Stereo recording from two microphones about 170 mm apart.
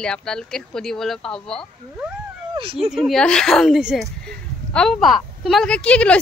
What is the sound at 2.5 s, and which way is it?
Speech, 30° right (ahead or behind).